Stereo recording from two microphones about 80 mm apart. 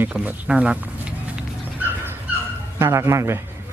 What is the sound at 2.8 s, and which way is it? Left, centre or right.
Speech, right.